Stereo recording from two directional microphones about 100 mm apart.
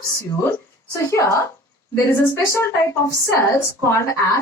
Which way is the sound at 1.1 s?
30° left (ahead or behind).